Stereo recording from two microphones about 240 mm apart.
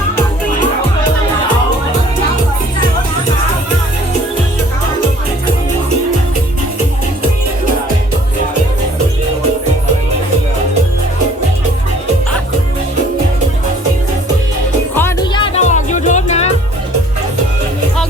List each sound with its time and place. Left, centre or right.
14.9 s music: centre
15.4 s music: left